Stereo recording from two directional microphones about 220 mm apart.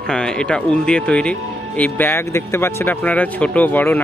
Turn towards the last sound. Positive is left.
turn(degrees=10)  # may be behind; listen again after turning